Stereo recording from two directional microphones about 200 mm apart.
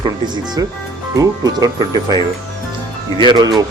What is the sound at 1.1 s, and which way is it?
Speech, 20° right (ahead or behind).